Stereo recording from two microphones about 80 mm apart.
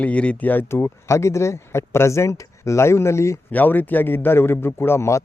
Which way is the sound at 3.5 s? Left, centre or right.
Left.